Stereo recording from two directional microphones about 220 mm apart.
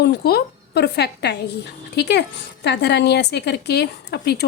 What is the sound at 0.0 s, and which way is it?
Speech, 45° left (ahead or behind).